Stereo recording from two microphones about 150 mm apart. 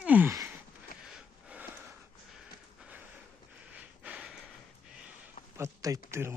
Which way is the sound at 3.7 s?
10° right (ahead or behind).